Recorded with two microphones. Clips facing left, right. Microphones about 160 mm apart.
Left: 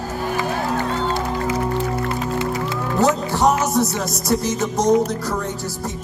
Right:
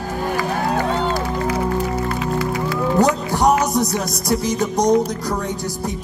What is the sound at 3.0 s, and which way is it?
Music, 15° right (ahead or behind).